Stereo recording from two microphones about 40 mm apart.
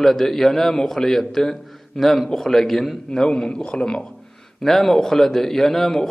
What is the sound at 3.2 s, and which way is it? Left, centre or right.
Speech, left.